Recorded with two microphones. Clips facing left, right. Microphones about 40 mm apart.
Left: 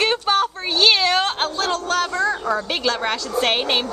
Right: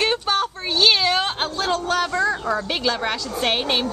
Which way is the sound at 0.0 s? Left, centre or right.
Centre.